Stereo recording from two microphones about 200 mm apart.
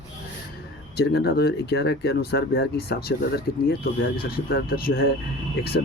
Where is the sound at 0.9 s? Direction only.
55° left (ahead or behind).